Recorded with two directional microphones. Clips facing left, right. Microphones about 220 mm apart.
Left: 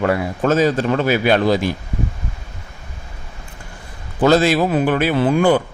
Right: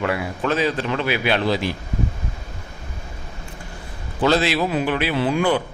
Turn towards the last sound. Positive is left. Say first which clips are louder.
# left 5 dB
turn(degrees=45)  # may be behind; listen again after turning